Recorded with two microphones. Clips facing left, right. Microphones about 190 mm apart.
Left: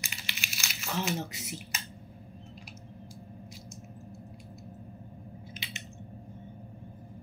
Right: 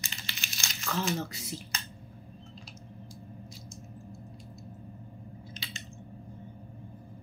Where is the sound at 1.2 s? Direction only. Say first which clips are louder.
Right 1 dB; 20° left (ahead or behind).